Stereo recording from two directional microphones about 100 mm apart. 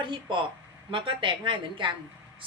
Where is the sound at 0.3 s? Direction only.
55° right (ahead or behind).